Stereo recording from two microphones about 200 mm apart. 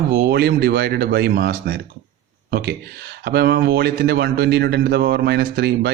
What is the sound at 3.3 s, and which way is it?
A man's voice, 55° right (ahead or behind).